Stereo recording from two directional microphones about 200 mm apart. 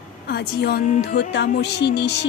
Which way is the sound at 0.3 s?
55° left (ahead or behind).